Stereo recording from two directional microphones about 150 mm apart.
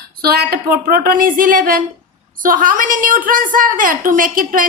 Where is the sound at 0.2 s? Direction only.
90° right.